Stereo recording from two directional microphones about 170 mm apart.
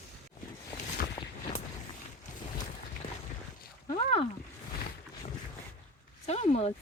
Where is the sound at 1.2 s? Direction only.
25° left (ahead or behind).